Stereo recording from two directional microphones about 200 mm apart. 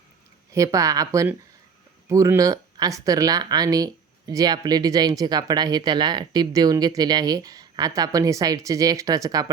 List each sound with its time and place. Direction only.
0.5 s speech: 15° right (ahead or behind)